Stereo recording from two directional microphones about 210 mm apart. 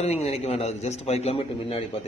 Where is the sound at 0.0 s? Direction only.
30° left (ahead or behind).